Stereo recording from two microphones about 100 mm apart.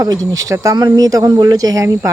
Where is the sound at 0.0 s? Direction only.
35° right (ahead or behind).